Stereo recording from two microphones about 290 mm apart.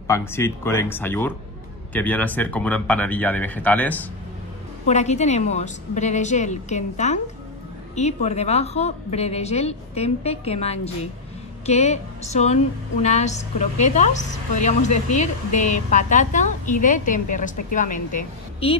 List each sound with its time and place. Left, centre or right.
0.0 s speech: centre
4.8 s a woman's voice: left